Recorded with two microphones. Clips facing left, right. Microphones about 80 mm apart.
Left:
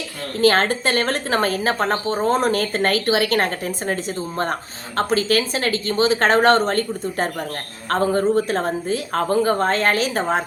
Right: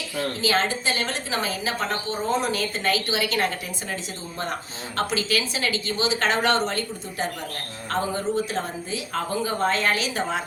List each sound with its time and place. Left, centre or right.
0.3 s speech: left